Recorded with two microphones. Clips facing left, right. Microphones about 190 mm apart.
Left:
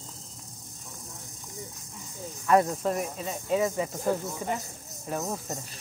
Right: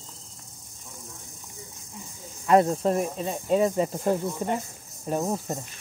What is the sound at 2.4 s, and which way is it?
Speech, 25° right (ahead or behind).